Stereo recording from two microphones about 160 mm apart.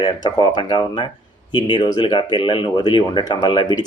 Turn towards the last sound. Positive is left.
turn(degrees=25)  # may be behind; listen again after turning